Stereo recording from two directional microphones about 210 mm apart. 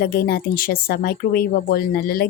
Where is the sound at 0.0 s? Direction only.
50° left (ahead or behind).